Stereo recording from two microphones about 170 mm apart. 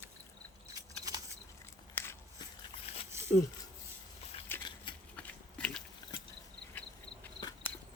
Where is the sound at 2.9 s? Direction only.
35° left (ahead or behind).